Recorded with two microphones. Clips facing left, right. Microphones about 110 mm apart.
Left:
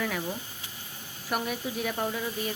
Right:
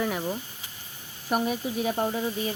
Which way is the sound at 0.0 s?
25° right (ahead or behind).